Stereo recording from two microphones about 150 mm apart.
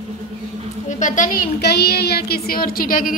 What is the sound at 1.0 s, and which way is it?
Speech, 60° left (ahead or behind).